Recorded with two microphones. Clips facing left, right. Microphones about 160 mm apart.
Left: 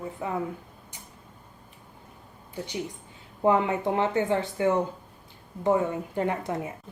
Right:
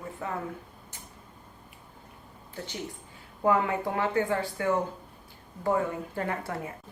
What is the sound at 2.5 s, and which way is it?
A woman's voice, 15° left (ahead or behind).